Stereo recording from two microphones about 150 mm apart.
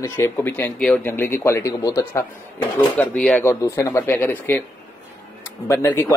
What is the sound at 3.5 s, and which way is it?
A man's voice, 20° left (ahead or behind).